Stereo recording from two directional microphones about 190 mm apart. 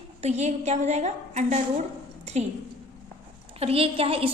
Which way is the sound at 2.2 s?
35° right (ahead or behind).